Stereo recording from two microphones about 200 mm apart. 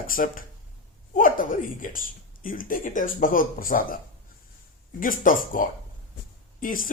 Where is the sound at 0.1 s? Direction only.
45° left (ahead or behind).